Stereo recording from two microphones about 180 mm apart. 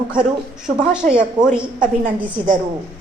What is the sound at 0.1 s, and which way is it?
Speech, 5° right (ahead or behind).